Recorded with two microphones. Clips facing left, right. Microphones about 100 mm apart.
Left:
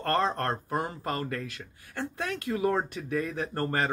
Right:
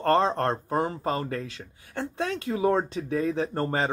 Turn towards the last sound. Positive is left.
turn(degrees=-20)  # may be behind; listen again after turning